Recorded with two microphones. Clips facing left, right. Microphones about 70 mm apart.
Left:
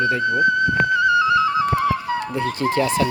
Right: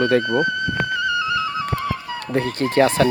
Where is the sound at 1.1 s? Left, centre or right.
Left.